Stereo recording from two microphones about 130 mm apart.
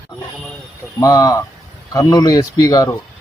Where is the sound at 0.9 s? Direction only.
30° left (ahead or behind).